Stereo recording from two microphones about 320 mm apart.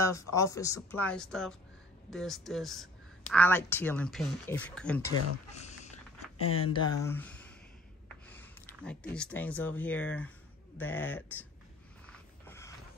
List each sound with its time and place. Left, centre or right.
0.0 s speech: centre
5.6 s dog: left
6.3 s speech: left
6.6 s speech: centre
12.4 s a sound: centre